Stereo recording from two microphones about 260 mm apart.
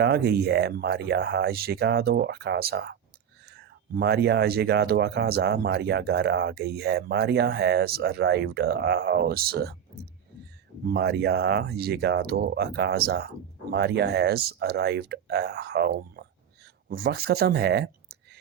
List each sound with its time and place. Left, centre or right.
0.0 s speech: right